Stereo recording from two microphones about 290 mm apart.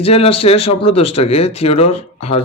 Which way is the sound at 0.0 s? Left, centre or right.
Centre.